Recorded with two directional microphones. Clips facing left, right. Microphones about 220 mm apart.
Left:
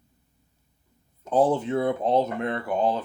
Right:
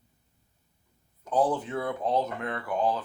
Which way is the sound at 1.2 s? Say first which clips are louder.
Left 5 dB; 25° left (ahead or behind).